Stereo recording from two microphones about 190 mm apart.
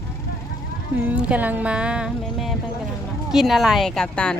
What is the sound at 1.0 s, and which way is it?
Music, 10° right (ahead or behind).